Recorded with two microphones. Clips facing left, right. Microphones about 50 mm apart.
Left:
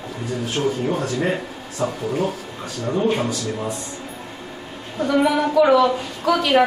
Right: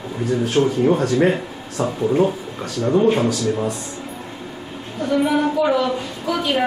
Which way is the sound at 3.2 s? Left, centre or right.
Right.